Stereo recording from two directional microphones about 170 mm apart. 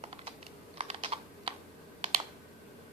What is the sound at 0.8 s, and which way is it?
Typing, 35° right (ahead or behind).